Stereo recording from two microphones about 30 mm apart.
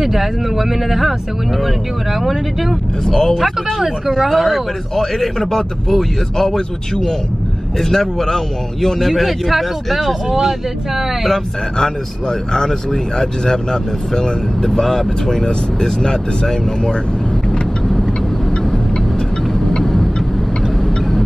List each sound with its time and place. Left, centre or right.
0.0 s speech: centre
3.1 s a man's voice: centre
4.1 s speech: centre
4.9 s a man's voice: centre
9.0 s speech: centre
11.8 s a man's voice: centre
19.8 s vehicle: centre